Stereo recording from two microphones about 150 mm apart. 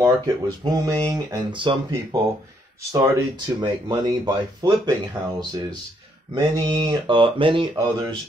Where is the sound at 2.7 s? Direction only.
20° right (ahead or behind).